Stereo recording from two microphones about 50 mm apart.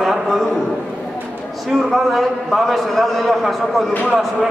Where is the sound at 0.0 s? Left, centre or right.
Centre.